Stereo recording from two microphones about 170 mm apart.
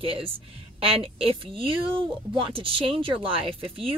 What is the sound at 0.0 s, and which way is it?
A woman's voice, 30° right (ahead or behind).